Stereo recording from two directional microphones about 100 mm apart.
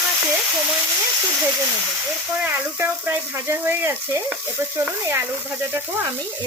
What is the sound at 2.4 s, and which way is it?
A woman's voice, 20° right (ahead or behind).